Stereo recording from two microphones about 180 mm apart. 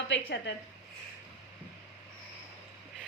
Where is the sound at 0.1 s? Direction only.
75° left (ahead or behind).